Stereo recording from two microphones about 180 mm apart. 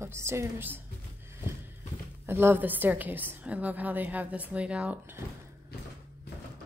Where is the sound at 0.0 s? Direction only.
15° right (ahead or behind).